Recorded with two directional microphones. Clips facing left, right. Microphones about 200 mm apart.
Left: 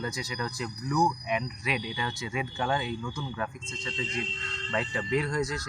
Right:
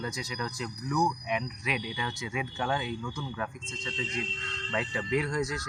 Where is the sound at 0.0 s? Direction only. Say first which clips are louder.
Left 1 dB; 5° left (ahead or behind).